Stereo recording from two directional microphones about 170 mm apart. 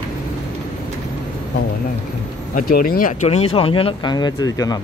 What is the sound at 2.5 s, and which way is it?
Speech, 60° left (ahead or behind).